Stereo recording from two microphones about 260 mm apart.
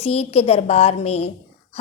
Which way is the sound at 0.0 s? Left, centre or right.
Left.